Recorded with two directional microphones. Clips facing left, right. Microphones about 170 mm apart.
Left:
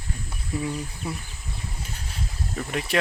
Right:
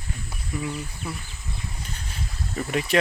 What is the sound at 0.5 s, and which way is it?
Speech, 30° left (ahead or behind).